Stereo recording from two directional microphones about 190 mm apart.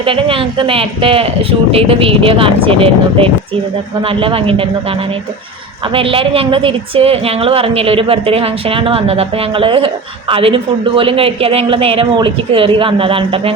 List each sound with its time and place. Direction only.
0.0 s a woman's voice: 30° right (ahead or behind)
5.9 s a woman's voice: 30° right (ahead or behind)